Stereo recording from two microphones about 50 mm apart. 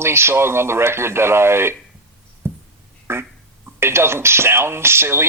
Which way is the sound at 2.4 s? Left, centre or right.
Right.